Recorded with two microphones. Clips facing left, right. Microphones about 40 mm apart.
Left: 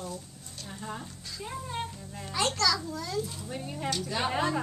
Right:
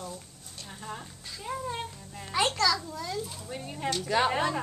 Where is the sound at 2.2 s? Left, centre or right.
Centre.